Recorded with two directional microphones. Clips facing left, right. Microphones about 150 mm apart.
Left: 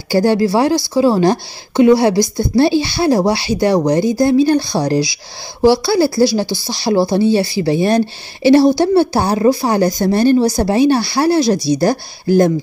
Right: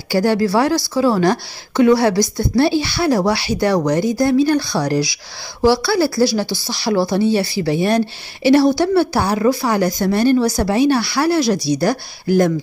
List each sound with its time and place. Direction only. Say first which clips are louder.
0.1 s a woman's voice: left 3 dB; 25° left (ahead or behind)